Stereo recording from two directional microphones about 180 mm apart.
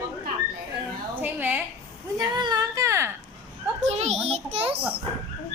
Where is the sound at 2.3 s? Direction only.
20° right (ahead or behind).